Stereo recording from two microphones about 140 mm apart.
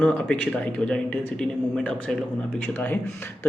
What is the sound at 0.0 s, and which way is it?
A man's voice, 10° left (ahead or behind).